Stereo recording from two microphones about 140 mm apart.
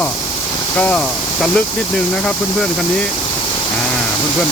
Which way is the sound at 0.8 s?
10° left (ahead or behind).